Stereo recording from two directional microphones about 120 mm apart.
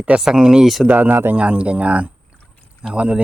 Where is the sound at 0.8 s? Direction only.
15° right (ahead or behind).